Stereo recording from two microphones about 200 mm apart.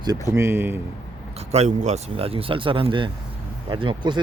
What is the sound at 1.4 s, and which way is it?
Speech, 35° right (ahead or behind).